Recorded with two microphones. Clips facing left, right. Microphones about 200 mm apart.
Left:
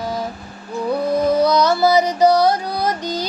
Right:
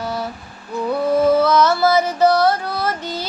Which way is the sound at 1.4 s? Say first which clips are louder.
Even; 15° left (ahead or behind).